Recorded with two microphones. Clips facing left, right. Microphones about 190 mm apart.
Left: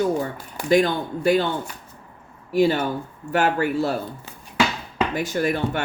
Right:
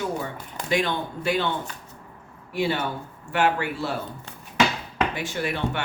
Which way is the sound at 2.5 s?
40° left (ahead or behind).